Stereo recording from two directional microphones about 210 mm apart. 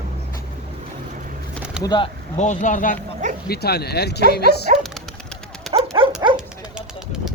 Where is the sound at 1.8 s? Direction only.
20° left (ahead or behind).